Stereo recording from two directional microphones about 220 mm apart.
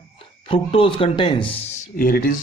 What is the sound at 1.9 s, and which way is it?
Speech, 40° left (ahead or behind).